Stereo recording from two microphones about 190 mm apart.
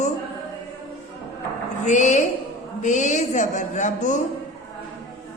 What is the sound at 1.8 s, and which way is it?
Speech, 40° left (ahead or behind).